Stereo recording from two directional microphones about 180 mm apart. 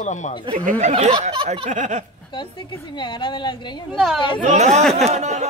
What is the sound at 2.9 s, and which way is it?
Speech, 25° left (ahead or behind).